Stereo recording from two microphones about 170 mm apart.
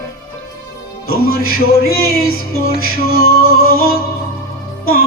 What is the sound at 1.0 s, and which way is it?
Music, 65° left (ahead or behind).